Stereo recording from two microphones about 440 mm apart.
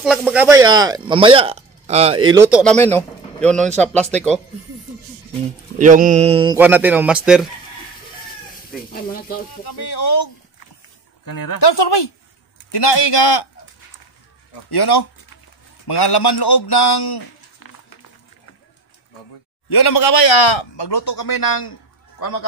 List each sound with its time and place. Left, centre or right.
0.0 s speech: centre
5.8 s speech: centre
9.7 s speech: left
11.2 s a woman's voice: left
11.7 s speech: left
14.7 s speech: left
19.9 s speech: left